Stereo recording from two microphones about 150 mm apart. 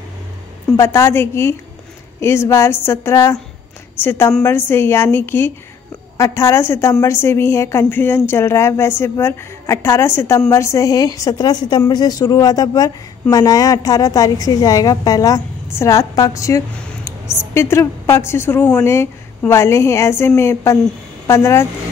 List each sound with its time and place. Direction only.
0.7 s a woman's voice: 15° left (ahead or behind)